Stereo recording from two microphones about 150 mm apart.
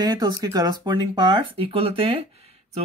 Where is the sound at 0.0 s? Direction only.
25° right (ahead or behind).